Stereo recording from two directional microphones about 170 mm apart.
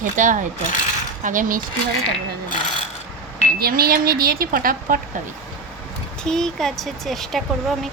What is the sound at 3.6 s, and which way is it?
Speech, 60° right (ahead or behind).